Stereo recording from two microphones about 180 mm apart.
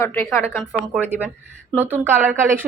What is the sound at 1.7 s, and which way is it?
Speech, 10° left (ahead or behind).